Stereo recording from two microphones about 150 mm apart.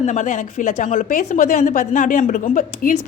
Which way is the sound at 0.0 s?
55° left (ahead or behind).